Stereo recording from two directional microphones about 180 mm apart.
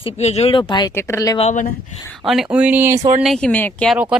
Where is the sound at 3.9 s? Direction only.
5° right (ahead or behind).